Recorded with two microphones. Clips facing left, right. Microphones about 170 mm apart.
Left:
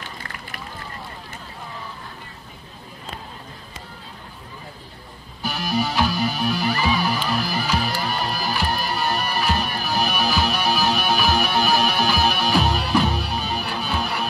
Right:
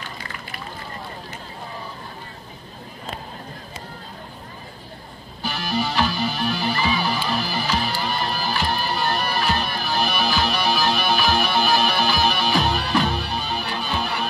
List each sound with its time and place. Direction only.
5.4 s music: 10° left (ahead or behind)